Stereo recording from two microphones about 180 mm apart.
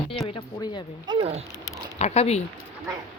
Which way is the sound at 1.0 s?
25° right (ahead or behind).